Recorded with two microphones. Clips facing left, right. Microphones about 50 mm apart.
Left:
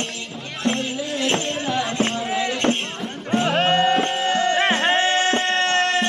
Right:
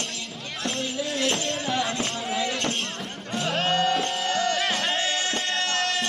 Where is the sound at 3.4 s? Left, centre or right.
Left.